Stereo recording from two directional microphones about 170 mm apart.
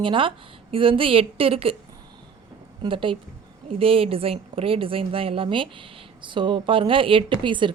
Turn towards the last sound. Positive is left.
turn(degrees=-30)  # may be behind; listen again after turning